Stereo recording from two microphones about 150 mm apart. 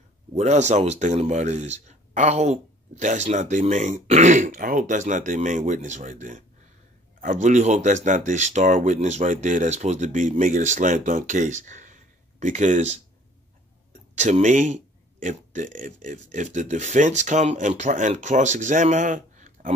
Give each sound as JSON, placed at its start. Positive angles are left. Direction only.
{"t": 0.3, "sound": "speech", "side_deg": -45}
{"t": 14.1, "sound": "speech", "side_deg": -50}